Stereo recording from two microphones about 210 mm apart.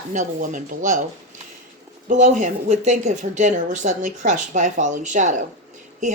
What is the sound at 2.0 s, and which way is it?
Speech, 35° right (ahead or behind).